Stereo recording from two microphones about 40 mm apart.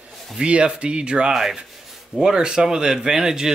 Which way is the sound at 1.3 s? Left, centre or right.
Centre.